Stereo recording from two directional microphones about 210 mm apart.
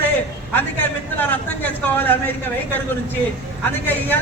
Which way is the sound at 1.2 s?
10° left (ahead or behind).